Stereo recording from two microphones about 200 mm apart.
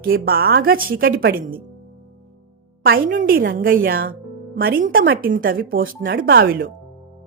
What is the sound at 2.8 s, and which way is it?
A woman's voice, 45° right (ahead or behind).